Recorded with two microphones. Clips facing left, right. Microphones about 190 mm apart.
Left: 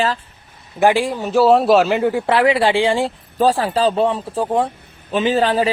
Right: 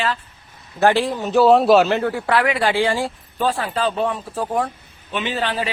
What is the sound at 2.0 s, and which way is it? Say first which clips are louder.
Speech: left 4 dB; 20° left (ahead or behind).